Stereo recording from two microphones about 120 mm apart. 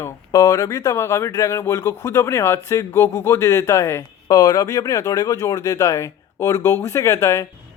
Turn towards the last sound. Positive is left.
turn(degrees=25)  # may be behind; listen again after turning